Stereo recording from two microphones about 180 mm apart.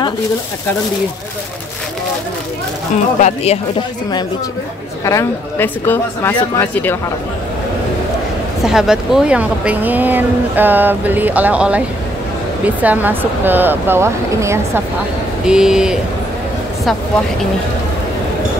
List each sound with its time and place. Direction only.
3.2 s speech: 40° left (ahead or behind)
5.0 s speech: 15° left (ahead or behind)
8.6 s speech: 5° right (ahead or behind)
15.4 s speech: 5° right (ahead or behind)